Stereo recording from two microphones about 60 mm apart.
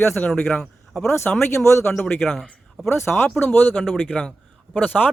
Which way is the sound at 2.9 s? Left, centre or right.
Left.